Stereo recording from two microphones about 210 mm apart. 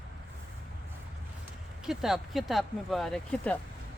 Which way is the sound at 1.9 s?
Centre (ahead or behind).